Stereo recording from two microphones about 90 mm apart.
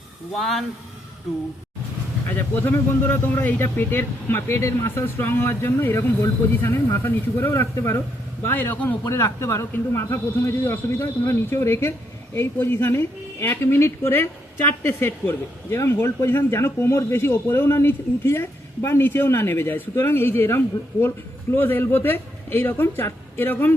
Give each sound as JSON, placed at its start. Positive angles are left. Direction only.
{"t": 0.3, "sound": "speech", "side_deg": 0}
{"t": 2.3, "sound": "a man's voice", "side_deg": 20}
{"t": 9.0, "sound": "a man's voice", "side_deg": 35}